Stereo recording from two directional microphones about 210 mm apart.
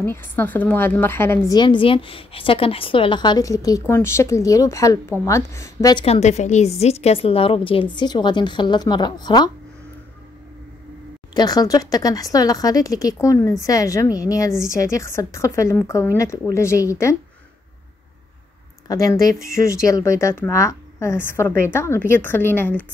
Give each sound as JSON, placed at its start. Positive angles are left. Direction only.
{"t": 0.0, "sound": "a woman's voice", "side_deg": 10}
{"t": 6.0, "sound": "a woman's voice", "side_deg": 30}
{"t": 11.3, "sound": "a woman's voice", "side_deg": 20}
{"t": 18.9, "sound": "a woman's voice", "side_deg": 15}